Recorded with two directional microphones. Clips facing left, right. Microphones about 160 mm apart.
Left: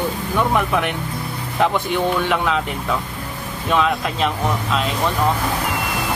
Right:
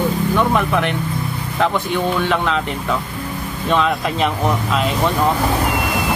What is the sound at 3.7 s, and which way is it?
Speech, centre (ahead or behind).